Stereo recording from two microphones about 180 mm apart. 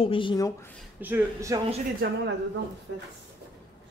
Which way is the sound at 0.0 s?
30° left (ahead or behind).